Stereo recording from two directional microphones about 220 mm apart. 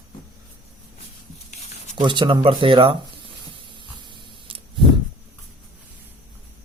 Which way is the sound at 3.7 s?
25° right (ahead or behind).